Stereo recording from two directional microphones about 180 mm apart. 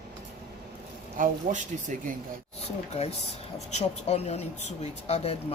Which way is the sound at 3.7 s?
35° left (ahead or behind).